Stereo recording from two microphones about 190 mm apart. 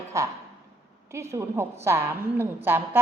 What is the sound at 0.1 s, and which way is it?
A woman's voice, 15° right (ahead or behind).